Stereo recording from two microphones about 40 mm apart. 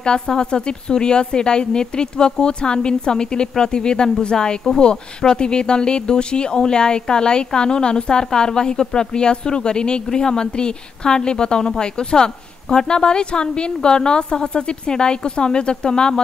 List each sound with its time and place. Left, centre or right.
0.4 s speech: left